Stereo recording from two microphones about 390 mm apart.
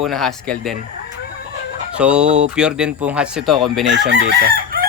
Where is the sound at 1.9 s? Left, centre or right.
Centre.